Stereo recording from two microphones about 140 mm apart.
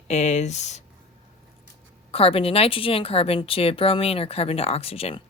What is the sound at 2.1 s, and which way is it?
Speech, 45° left (ahead or behind).